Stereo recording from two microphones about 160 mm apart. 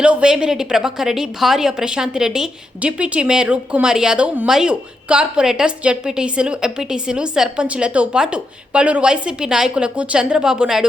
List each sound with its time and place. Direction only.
0.0 s a woman's voice: 5° right (ahead or behind)